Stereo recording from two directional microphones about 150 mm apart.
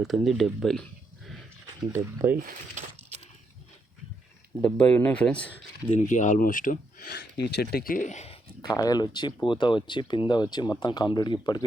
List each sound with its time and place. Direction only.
0.0 s speech: centre (ahead or behind)
1.9 s speech: 15° right (ahead or behind)
2.5 s a sound: 55° right (ahead or behind)
4.6 s speech: 10° left (ahead or behind)
5.9 s speech: 50° left (ahead or behind)
8.6 s speech: 25° left (ahead or behind)